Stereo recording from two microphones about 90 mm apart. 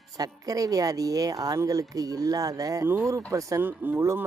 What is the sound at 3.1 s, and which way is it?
Speech, 35° right (ahead or behind).